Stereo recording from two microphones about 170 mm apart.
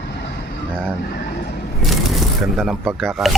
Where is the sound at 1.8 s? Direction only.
Centre (ahead or behind).